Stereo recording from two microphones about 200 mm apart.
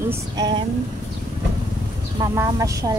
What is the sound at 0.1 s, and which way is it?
Speech, 25° right (ahead or behind).